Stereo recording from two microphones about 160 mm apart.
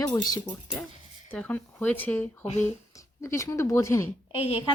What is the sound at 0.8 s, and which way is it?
Speech, 10° left (ahead or behind).